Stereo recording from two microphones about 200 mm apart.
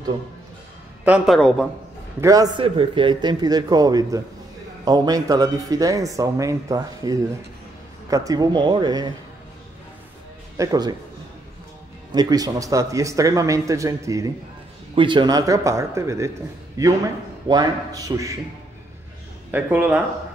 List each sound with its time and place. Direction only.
1.0 s a woman's voice: 5° right (ahead or behind)
2.1 s a man's voice: 15° right (ahead or behind)
10.6 s a man's voice: 20° right (ahead or behind)
12.1 s speech: 20° right (ahead or behind)
19.5 s speech: 10° right (ahead or behind)